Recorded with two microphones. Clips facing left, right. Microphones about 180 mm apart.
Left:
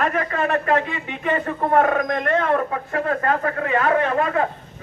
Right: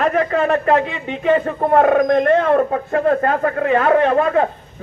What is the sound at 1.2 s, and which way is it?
Speech, 35° right (ahead or behind).